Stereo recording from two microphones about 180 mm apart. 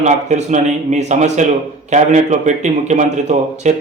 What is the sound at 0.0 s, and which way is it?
A man's voice, 40° right (ahead or behind).